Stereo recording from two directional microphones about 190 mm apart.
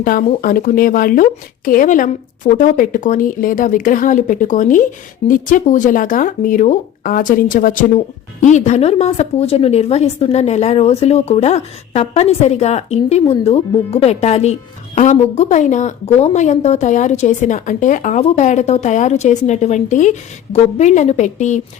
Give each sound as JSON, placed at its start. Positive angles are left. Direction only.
{"t": 0.0, "sound": "speech", "side_deg": 45}